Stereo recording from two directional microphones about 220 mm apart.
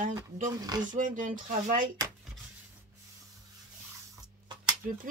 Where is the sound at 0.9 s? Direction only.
35° right (ahead or behind).